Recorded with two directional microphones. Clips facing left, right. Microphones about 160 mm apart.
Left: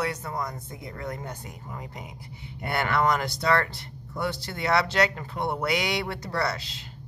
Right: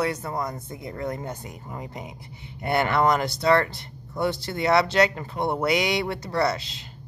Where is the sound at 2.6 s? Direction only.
25° right (ahead or behind).